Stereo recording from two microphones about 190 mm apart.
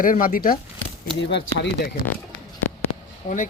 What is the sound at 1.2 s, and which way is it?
Speech, 65° left (ahead or behind).